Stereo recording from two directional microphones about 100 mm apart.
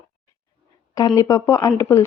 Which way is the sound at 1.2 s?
30° left (ahead or behind).